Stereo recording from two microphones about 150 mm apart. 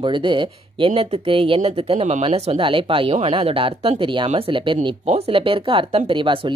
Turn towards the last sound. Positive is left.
turn(degrees=-35)  # may be behind; listen again after turning